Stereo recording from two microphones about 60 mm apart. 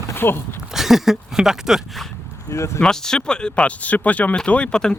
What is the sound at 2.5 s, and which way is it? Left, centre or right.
Speech, left.